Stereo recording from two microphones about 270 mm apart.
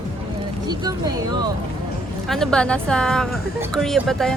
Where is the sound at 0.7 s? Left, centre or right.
Centre.